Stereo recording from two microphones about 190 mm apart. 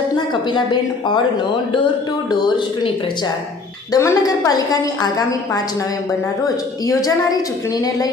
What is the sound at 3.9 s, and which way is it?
A woman's voice, 20° left (ahead or behind).